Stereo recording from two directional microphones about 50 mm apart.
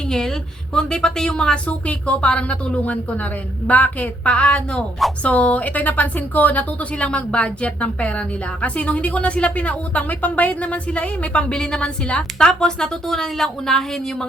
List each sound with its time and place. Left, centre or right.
0.1 s a woman's voice: centre